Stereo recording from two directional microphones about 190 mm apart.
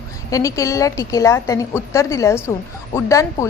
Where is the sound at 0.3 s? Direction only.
15° left (ahead or behind).